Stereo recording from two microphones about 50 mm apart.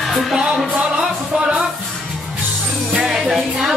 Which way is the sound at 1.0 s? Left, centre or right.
Right.